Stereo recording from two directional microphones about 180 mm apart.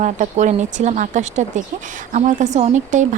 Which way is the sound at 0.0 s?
40° right (ahead or behind).